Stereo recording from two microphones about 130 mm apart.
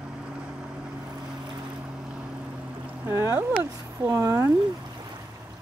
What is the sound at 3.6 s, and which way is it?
Speech, 25° right (ahead or behind).